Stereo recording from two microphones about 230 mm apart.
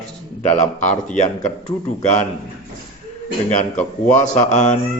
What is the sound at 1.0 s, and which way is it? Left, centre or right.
Mantra, left.